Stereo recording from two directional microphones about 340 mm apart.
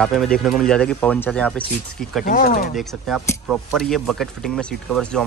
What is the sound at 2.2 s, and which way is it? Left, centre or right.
Speech, left.